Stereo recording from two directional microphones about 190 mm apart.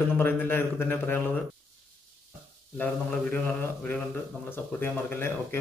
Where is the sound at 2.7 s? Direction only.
10° left (ahead or behind).